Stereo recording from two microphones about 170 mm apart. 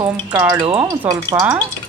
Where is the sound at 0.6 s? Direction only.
35° right (ahead or behind).